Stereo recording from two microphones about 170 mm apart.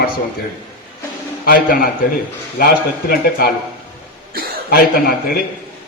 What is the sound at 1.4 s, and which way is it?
A man's voice, 55° left (ahead or behind).